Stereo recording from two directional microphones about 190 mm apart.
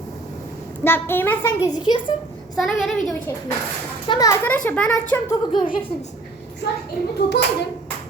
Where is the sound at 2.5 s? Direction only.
Centre (ahead or behind).